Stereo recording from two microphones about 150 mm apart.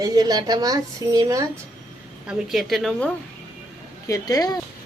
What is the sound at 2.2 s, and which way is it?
Speech, centre (ahead or behind).